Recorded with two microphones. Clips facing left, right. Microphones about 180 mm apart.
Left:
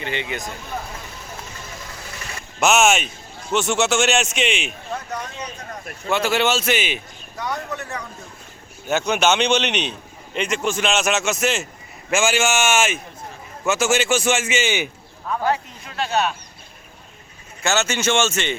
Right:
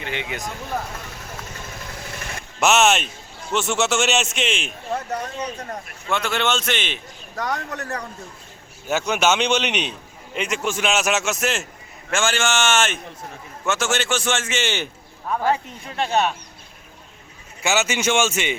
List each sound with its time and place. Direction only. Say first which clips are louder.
0.0 s a man's voice: left 2 dB; 5° right (ahead or behind)
2.6 s a man's voice: left 1 dB; centre (ahead or behind)
6.1 s a man's voice: left 3 dB; 5° left (ahead or behind)
7.3 s speech: right 1 dB; 40° right (ahead or behind)
8.9 s a man's voice: left 1 dB; 5° right (ahead or behind)
15.4 s speech: even; 25° right (ahead or behind)
17.6 s a man's voice: even; 10° right (ahead or behind)